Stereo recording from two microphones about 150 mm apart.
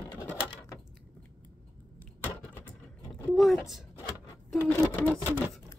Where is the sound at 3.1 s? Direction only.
Centre (ahead or behind).